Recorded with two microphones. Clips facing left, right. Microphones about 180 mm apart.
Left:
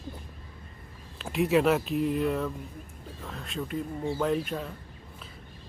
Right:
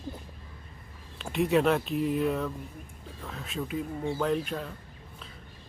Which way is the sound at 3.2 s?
Centre (ahead or behind).